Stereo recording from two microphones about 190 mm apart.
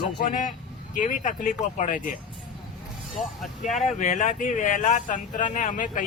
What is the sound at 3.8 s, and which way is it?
Speech, 40° left (ahead or behind).